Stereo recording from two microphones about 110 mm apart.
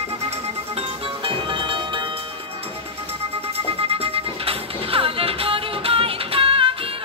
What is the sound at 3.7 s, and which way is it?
Music, 60° right (ahead or behind).